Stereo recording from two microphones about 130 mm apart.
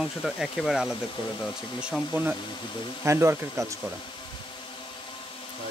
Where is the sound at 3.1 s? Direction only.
20° right (ahead or behind).